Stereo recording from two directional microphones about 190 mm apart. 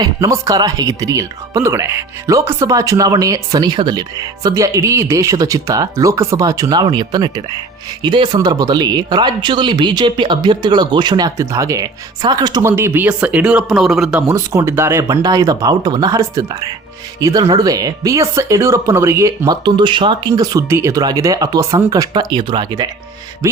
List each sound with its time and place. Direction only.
0.0 s speech: 20° right (ahead or behind)